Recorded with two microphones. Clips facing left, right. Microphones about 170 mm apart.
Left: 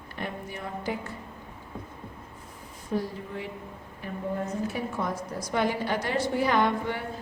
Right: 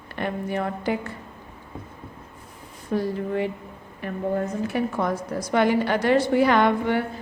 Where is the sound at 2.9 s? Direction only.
65° right (ahead or behind).